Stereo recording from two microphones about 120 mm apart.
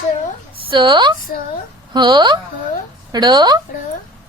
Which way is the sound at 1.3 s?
90° left.